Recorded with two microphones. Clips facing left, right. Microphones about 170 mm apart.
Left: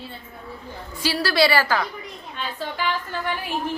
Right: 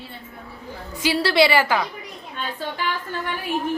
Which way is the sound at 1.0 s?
20° right (ahead or behind).